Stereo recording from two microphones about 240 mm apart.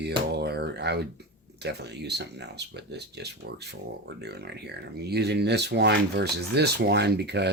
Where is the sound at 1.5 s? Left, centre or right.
Right.